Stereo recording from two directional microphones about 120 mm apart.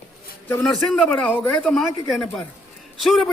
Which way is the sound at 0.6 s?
5° left (ahead or behind).